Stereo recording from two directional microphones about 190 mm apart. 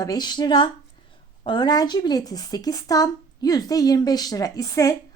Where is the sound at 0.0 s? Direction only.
20° left (ahead or behind).